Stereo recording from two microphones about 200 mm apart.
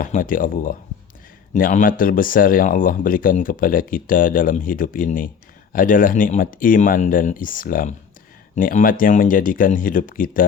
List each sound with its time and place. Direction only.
0.0 s speech: 45° left (ahead or behind)